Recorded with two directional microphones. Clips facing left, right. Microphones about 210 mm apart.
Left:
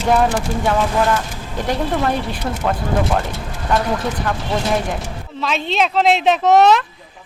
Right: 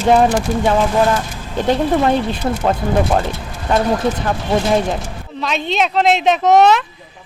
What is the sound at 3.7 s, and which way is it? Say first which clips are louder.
Speech: right 4 dB; 25° right (ahead or behind).